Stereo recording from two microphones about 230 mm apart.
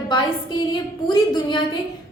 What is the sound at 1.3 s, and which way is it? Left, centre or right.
Speech, centre.